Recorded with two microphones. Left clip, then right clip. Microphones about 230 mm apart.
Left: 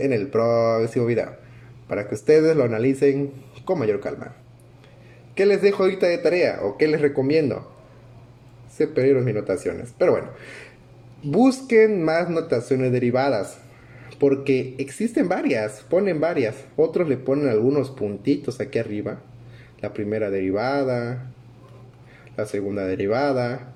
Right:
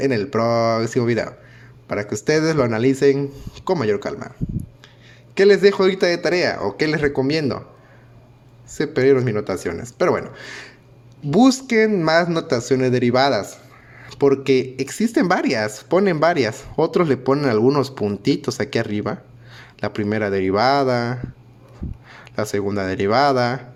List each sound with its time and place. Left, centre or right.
0.0 s speech: right
5.3 s speech: right
8.8 s speech: right
22.2 s speech: right